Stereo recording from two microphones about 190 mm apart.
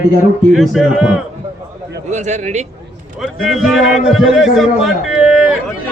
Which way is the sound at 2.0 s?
40° right (ahead or behind).